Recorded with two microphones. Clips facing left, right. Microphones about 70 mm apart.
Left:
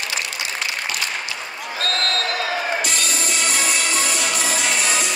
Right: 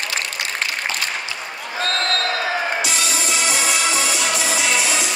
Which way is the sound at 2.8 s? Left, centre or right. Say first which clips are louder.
Right 1 dB; left.